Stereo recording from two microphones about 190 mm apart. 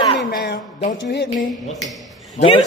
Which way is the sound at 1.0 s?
65° left (ahead or behind).